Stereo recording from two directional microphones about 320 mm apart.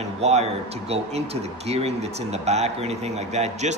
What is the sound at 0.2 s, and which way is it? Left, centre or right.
A man's voice, right.